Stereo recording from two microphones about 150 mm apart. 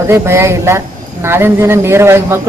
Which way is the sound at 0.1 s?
15° right (ahead or behind).